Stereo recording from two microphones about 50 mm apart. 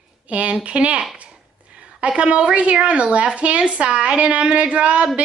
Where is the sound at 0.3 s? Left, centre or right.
Right.